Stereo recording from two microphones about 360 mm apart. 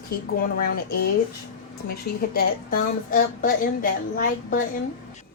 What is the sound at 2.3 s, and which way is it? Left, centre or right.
A woman's voice, left.